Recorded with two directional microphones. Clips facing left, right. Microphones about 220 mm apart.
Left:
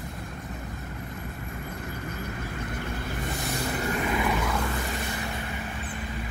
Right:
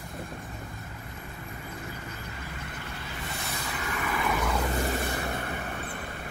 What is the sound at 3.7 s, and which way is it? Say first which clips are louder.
Vehicle: left 5 dB; 35° left (ahead or behind).